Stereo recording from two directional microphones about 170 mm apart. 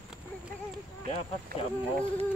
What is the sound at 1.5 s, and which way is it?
Speech, 60° right (ahead or behind).